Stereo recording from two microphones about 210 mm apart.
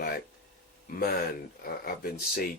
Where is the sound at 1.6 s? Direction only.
45° left (ahead or behind).